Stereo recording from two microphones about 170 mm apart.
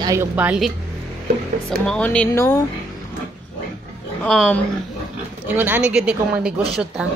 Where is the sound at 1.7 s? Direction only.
5° left (ahead or behind).